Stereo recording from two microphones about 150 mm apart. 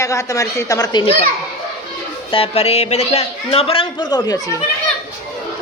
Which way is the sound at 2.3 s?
40° left (ahead or behind).